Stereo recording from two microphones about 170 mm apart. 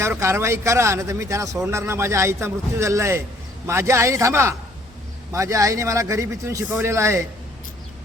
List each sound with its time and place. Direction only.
0.0 s a man's voice: 15° right (ahead or behind)